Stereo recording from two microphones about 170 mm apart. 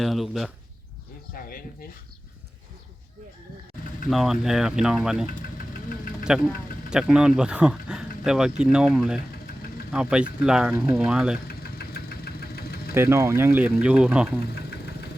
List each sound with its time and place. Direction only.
0.0 s speech: centre (ahead or behind)
1.3 s a sound: 60° left (ahead or behind)
4.1 s speech: centre (ahead or behind)
6.2 s speech: 5° right (ahead or behind)
11.4 s engine: 65° left (ahead or behind)
12.9 s speech: 15° right (ahead or behind)